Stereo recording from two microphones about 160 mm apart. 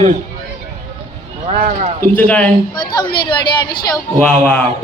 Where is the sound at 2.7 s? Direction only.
30° left (ahead or behind).